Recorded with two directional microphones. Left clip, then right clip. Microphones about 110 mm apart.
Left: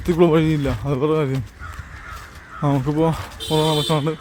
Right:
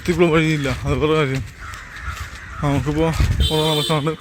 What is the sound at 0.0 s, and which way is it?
Speech, 25° left (ahead or behind).